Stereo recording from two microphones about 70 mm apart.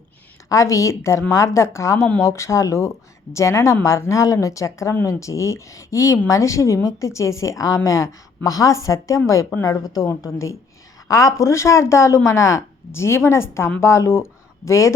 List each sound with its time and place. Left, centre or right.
0.4 s speech: left